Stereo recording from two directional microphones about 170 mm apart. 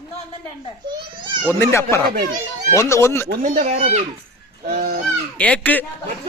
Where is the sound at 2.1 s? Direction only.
60° right (ahead or behind).